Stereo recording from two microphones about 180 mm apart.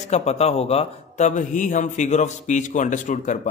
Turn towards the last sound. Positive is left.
turn(degrees=45)  # may be behind; listen again after turning